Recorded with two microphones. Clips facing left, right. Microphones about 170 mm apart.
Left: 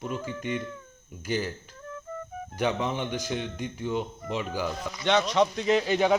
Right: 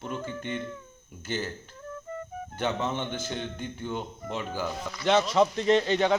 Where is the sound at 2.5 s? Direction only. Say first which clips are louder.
Left 2 dB; 10° left (ahead or behind).